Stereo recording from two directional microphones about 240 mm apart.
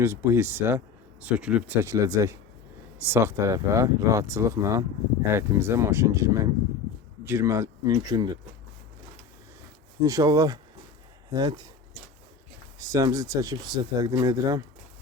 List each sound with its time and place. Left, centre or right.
0.0 s speech: centre
10.0 s speech: centre
12.8 s speech: centre